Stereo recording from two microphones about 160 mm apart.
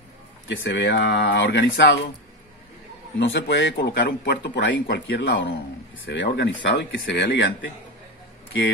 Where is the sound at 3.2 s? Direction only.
90° left.